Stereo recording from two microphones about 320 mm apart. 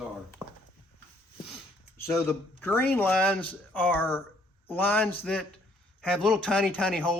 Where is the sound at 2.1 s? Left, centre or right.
Centre.